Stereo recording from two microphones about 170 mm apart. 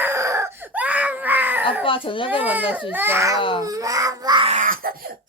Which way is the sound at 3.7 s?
20° right (ahead or behind).